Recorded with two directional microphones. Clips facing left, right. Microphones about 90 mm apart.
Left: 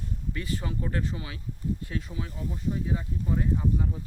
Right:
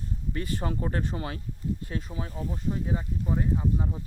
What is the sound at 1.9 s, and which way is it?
Speech, 35° right (ahead or behind).